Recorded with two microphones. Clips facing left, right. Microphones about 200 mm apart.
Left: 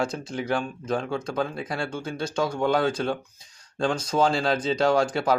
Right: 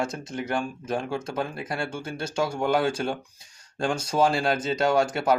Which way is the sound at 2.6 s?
5° right (ahead or behind).